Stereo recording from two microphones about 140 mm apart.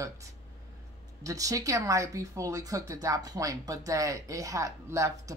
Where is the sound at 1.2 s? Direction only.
25° right (ahead or behind).